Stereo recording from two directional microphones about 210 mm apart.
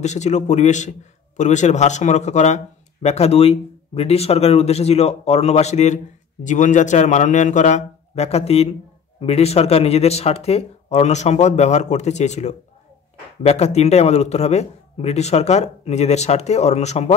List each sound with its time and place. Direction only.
0.0 s a man's voice: 35° left (ahead or behind)